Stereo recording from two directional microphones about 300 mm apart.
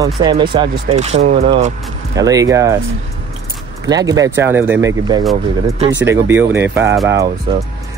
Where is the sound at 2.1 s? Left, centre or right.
Centre.